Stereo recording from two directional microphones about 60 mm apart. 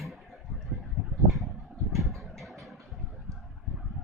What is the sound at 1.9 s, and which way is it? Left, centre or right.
Vehicle, centre.